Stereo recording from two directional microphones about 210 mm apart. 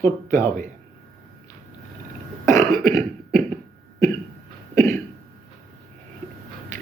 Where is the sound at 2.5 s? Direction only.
15° left (ahead or behind).